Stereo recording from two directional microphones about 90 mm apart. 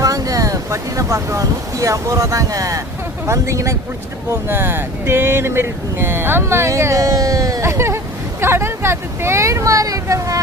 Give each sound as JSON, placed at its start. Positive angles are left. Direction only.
{"t": 0.0, "sound": "speech", "side_deg": -40}